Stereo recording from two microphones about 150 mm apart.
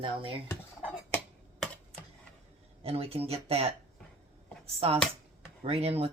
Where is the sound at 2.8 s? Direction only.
40° right (ahead or behind).